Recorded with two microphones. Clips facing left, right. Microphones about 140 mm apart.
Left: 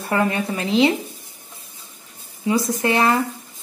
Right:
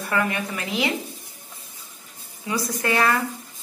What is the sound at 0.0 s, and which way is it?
Speech, 30° left (ahead or behind).